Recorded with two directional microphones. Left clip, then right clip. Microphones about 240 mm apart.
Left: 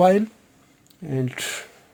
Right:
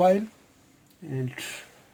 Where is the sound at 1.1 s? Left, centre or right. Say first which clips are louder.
Left 7 dB; left.